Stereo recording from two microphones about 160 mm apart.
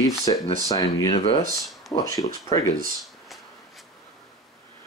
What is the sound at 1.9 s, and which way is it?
Speech, 20° left (ahead or behind).